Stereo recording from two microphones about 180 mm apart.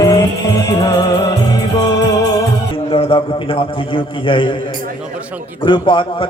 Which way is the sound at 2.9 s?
30° left (ahead or behind).